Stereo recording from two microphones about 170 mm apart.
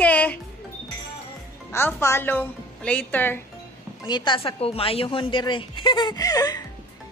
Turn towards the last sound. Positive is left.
turn(degrees=20)  # may be behind; listen again after turning